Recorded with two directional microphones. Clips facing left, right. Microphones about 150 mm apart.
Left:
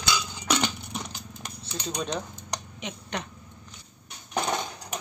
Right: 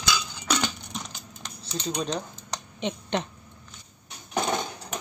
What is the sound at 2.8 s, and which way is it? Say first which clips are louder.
Speech: right 10 dB; 25° right (ahead or behind).